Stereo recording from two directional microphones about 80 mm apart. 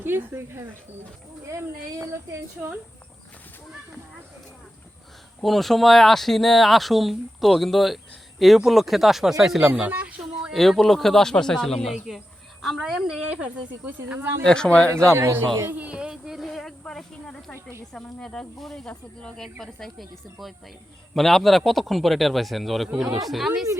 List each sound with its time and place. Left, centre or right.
0.0 s speech: right
5.4 s speech: centre
9.7 s a sound: centre
10.5 s speech: centre
13.4 s speech: centre
14.2 s speech: right
14.4 s speech: centre
15.1 s speech: right
15.7 s speech: centre